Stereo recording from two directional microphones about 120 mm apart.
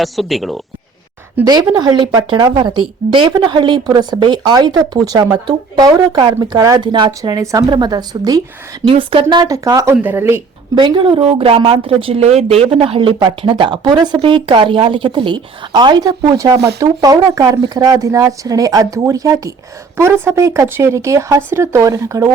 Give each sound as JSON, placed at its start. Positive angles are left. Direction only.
{"t": 0.0, "sound": "speech", "side_deg": 0}
{"t": 1.5, "sound": "speech", "side_deg": -35}
{"t": 7.2, "sound": "speech", "side_deg": -30}
{"t": 8.9, "sound": "speech", "side_deg": -50}
{"t": 9.4, "sound": "speech", "side_deg": -30}
{"t": 10.0, "sound": "speech", "side_deg": -15}
{"t": 10.8, "sound": "speech", "side_deg": -40}